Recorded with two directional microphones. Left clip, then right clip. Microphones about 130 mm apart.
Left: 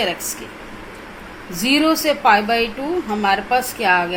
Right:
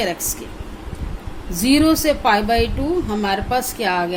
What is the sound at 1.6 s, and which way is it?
A woman's voice, 90° right.